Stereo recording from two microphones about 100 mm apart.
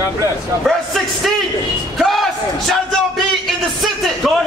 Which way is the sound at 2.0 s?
Centre (ahead or behind).